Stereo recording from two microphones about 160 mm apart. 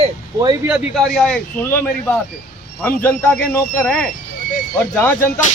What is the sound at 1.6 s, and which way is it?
A man's voice, 15° left (ahead or behind).